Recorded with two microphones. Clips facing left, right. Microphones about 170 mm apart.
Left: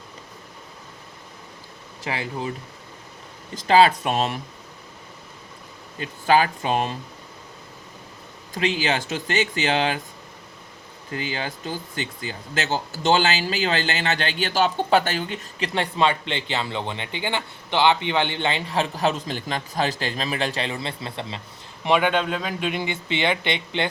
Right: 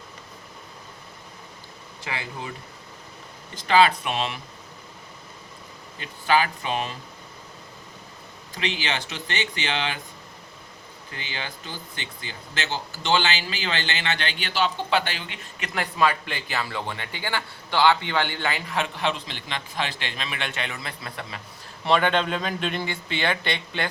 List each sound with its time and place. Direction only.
2.0 s speech: 35° left (ahead or behind)
3.5 s speech: 40° left (ahead or behind)
6.0 s speech: 40° left (ahead or behind)
8.5 s speech: 40° left (ahead or behind)
11.1 s speech: 40° left (ahead or behind)
21.8 s a man's voice: 10° left (ahead or behind)